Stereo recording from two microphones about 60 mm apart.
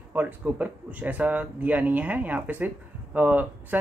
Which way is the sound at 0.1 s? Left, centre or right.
Right.